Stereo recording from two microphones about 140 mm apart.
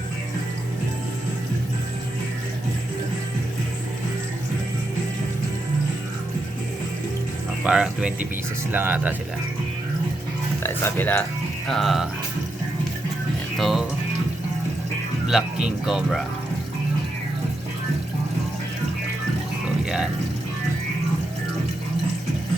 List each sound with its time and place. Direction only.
7.6 s speech: 5° right (ahead or behind)
10.6 s speech: 15° left (ahead or behind)
11.7 s speech: centre (ahead or behind)
13.6 s speech: centre (ahead or behind)
15.3 s speech: 5° right (ahead or behind)
19.8 s a sound: 5° right (ahead or behind)